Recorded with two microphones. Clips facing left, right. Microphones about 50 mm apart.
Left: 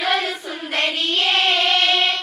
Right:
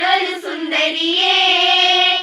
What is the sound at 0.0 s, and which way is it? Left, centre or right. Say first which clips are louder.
Child singing: right 5 dB; right.